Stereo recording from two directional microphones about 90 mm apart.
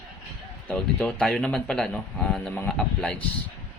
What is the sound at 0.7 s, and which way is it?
Speech, 10° left (ahead or behind).